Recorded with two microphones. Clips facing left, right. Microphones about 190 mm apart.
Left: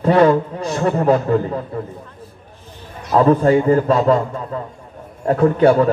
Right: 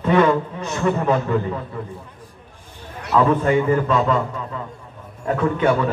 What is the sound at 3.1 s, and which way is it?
A man's voice, 35° left (ahead or behind).